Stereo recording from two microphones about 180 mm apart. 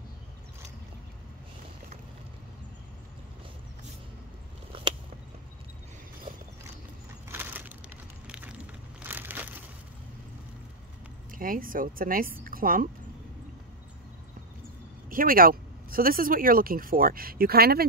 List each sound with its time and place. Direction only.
7.2 s crushing: 10° right (ahead or behind)
8.3 s a sound: 5° right (ahead or behind)
9.0 s crushing: 10° right (ahead or behind)
11.3 s speech: 50° right (ahead or behind)
12.4 s a sound: 50° right (ahead or behind)
15.0 s speech: 50° right (ahead or behind)